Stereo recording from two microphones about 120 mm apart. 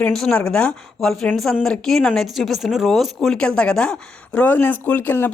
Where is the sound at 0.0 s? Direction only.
5° left (ahead or behind).